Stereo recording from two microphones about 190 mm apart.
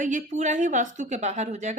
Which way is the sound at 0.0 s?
40° right (ahead or behind).